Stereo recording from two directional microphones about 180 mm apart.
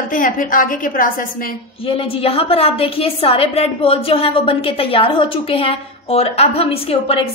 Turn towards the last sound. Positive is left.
turn(degrees=35)  # may be behind; listen again after turning